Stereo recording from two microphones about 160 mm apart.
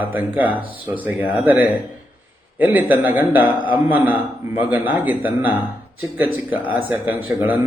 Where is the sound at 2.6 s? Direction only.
10° right (ahead or behind).